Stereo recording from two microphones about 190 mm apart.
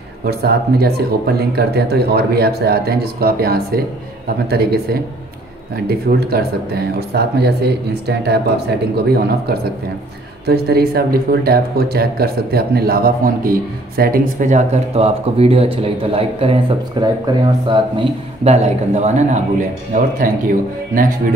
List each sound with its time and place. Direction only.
0.3 s speech: 55° right (ahead or behind)
5.9 s a man's voice: 55° right (ahead or behind)